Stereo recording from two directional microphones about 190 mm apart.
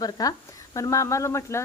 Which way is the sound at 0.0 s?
20° left (ahead or behind).